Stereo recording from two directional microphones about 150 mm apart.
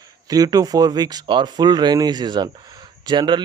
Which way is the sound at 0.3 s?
25° right (ahead or behind).